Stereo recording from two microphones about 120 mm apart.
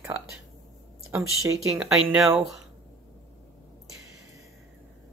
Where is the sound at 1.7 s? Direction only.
5° right (ahead or behind).